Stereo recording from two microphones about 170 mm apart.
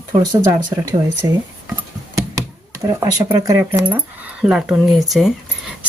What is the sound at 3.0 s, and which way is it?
Speech, 20° right (ahead or behind).